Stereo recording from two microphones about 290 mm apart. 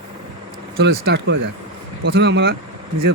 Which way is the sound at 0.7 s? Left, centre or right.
Right.